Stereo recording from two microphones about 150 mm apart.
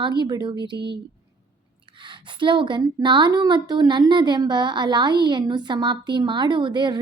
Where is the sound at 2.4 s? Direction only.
35° right (ahead or behind).